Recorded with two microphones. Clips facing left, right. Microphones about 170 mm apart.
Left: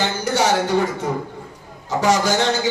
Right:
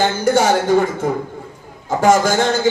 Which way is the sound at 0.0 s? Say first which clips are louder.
Right 5 dB; 50° right (ahead or behind).